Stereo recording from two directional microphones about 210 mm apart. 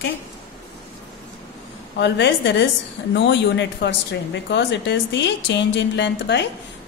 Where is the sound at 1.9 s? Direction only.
55° left (ahead or behind).